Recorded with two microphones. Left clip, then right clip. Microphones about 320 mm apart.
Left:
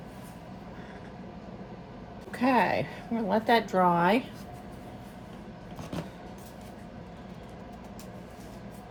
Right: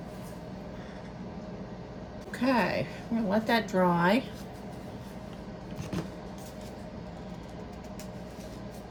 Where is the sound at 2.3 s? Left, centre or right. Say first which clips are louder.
Left 3 dB; centre.